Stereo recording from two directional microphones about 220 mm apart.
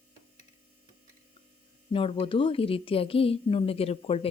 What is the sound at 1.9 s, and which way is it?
A woman's voice, 25° left (ahead or behind).